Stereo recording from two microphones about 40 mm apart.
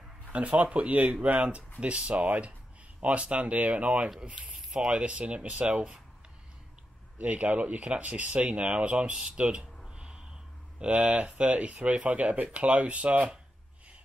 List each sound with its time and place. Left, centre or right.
0.3 s speech: right
2.2 s speech: right
3.0 s speech: right
4.7 s speech: right
5.1 s speech: right
7.2 s speech: right
9.1 s speech: right
9.8 s a sound: right
10.8 s speech: right